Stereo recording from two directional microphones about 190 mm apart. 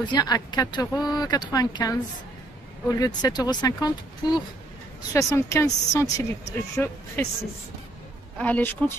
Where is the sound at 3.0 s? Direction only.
20° left (ahead or behind).